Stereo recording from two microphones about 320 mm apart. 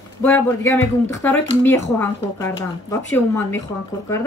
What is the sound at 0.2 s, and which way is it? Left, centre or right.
Speech, centre.